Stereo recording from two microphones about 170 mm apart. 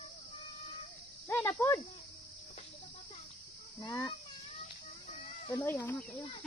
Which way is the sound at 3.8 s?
20° left (ahead or behind).